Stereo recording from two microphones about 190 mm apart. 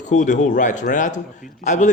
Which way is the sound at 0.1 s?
40° left (ahead or behind).